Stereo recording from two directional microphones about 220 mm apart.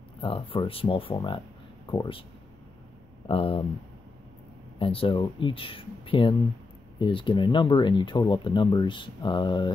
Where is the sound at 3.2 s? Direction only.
25° left (ahead or behind).